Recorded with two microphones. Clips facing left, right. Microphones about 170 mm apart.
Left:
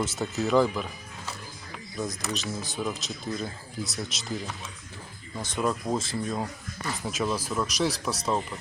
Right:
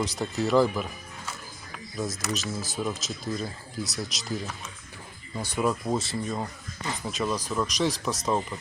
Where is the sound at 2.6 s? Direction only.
Centre (ahead or behind).